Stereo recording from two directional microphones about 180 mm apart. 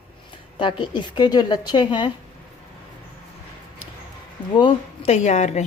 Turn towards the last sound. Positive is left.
turn(degrees=40)  # may be behind; listen again after turning